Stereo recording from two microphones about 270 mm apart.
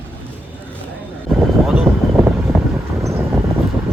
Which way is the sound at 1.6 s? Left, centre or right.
Centre.